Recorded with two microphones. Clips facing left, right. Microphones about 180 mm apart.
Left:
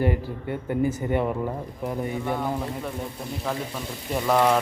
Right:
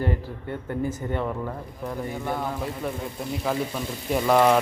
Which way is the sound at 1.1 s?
15° left (ahead or behind).